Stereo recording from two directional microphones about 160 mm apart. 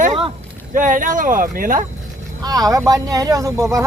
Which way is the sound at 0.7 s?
55° right (ahead or behind).